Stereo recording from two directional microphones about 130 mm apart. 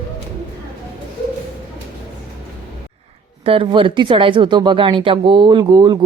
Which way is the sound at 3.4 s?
40° right (ahead or behind).